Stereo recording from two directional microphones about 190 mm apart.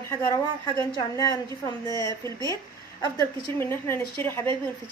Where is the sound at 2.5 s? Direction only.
15° left (ahead or behind).